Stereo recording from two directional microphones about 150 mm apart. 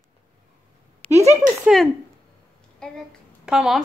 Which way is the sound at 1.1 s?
45° right (ahead or behind).